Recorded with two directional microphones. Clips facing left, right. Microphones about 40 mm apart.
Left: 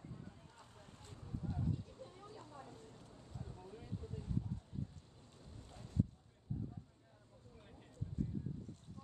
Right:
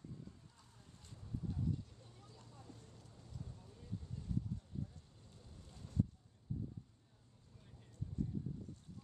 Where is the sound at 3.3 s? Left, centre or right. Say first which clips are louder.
Left 3 dB; left.